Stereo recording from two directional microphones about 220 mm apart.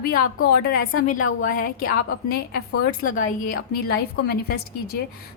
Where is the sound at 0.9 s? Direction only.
35° left (ahead or behind).